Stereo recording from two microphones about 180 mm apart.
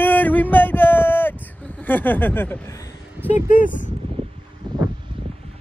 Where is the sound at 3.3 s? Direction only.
50° left (ahead or behind).